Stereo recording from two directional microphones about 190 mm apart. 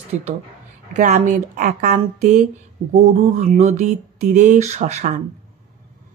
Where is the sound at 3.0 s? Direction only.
35° right (ahead or behind).